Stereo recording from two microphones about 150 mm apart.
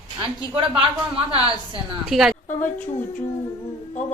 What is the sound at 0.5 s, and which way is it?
Speech, 35° right (ahead or behind).